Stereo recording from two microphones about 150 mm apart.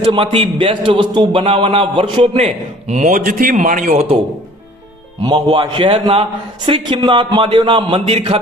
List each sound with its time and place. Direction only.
0.0 s a man's voice: 35° right (ahead or behind); by 4.0 s 60° right (ahead or behind)
5.2 s a man's voice: 30° right (ahead or behind)